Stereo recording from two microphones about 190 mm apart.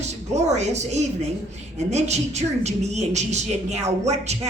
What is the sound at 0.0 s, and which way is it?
A woman's voice, 35° right (ahead or behind).